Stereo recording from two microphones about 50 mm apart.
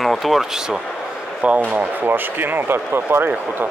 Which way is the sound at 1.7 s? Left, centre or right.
Right.